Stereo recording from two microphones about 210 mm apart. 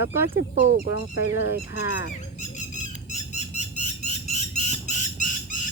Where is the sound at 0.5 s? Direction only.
35° right (ahead or behind).